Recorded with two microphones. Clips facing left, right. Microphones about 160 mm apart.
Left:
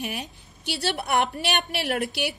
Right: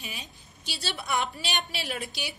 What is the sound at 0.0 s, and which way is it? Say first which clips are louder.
A woman's voice: left 10 dB; 60° left (ahead or behind).